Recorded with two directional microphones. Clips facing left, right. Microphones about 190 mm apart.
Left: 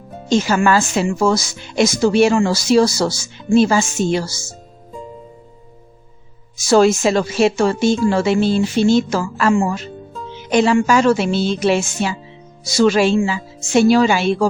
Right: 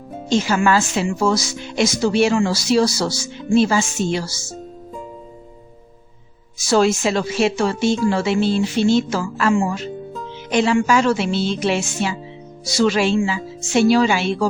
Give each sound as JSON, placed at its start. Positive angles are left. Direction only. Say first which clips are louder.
{"t": 0.3, "sound": "speech", "louder": "left 2 dB", "side_deg": 45}
{"t": 6.7, "sound": "speech", "louder": "left 4 dB", "side_deg": 45}